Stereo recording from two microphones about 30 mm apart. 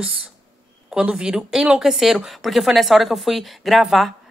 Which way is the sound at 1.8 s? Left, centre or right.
Centre.